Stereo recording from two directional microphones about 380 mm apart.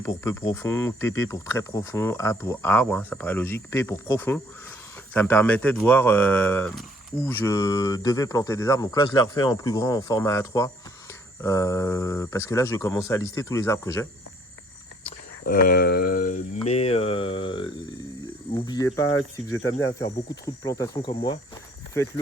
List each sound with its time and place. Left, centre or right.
0.0 s speech: centre
15.0 s speech: left